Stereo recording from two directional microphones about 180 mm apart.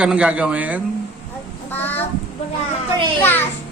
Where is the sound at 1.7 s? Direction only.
10° left (ahead or behind).